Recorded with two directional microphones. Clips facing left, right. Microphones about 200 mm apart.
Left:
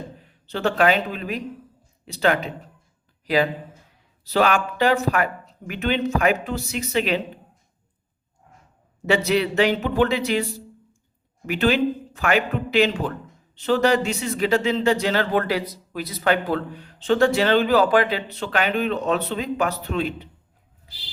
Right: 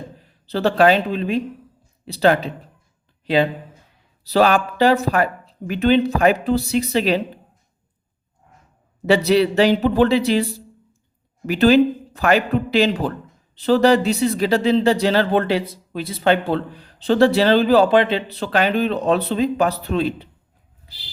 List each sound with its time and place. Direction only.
0.4 s speech: 35° right (ahead or behind)
9.0 s speech: 35° right (ahead or behind)
11.4 s speech: 35° right (ahead or behind)